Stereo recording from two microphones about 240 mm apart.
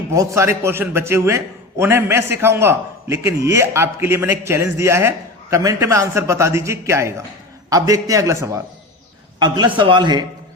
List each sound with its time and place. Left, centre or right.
0.1 s a man's voice: centre